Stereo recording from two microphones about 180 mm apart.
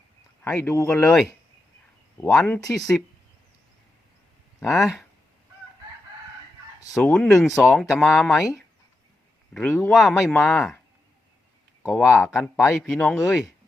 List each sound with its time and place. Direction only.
0.4 s speech: 15° left (ahead or behind)
2.2 s speech: 5° left (ahead or behind)
4.6 s speech: centre (ahead or behind)
6.9 s speech: 5° left (ahead or behind)
7.3 s speech: 15° left (ahead or behind)
7.7 s speech: centre (ahead or behind)
12.0 s speech: 5° right (ahead or behind)